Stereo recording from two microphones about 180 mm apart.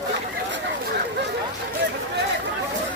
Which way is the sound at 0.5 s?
75° right (ahead or behind).